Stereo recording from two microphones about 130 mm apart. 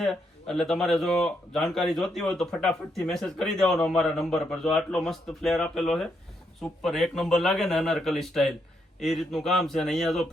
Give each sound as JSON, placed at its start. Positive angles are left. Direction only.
{"t": 0.0, "sound": "speech", "side_deg": 0}